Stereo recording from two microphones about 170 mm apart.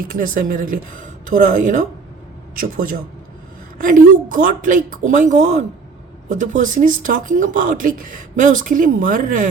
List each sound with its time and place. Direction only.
0.0 s a man's voice: 55° right (ahead or behind)